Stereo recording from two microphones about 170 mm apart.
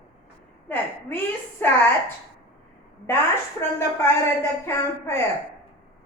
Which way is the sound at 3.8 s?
15° left (ahead or behind).